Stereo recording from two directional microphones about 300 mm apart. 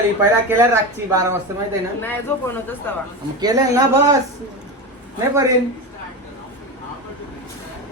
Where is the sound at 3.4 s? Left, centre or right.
Centre.